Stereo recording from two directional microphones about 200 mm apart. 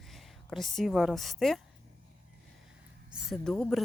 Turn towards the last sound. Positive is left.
turn(degrees=0)  # may be behind; listen again after turning